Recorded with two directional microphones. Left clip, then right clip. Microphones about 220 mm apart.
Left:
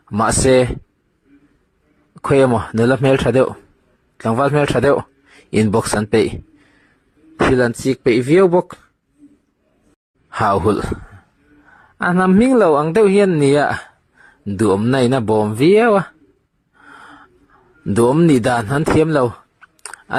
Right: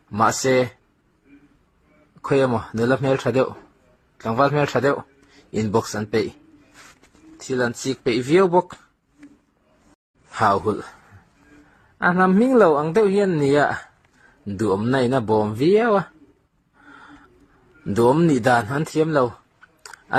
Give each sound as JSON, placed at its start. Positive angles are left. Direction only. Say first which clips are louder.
{"t": 0.1, "sound": "speech", "louder": "left 5 dB", "side_deg": 45}
{"t": 2.1, "sound": "speech", "louder": "left 6 dB", "side_deg": 45}
{"t": 7.5, "sound": "speech", "louder": "left 7 dB", "side_deg": 40}
{"t": 10.3, "sound": "speech", "louder": "left 4 dB", "side_deg": 45}
{"t": 16.8, "sound": "gasp", "louder": "left 5 dB", "side_deg": 40}
{"t": 17.8, "sound": "speech", "louder": "left 4 dB", "side_deg": 40}